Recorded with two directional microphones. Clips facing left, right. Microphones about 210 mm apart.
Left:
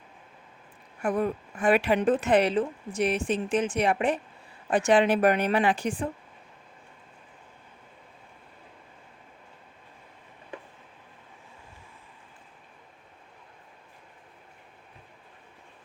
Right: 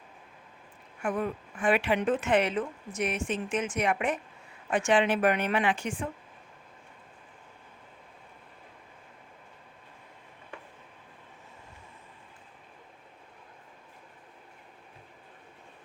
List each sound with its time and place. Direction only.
1.0 s speech: 35° left (ahead or behind)